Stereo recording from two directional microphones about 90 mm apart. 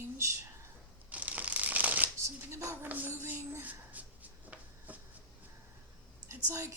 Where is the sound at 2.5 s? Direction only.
30° right (ahead or behind).